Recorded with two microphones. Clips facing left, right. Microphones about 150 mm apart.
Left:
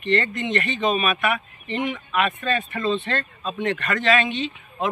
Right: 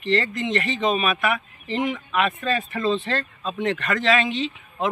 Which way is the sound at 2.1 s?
5° left (ahead or behind).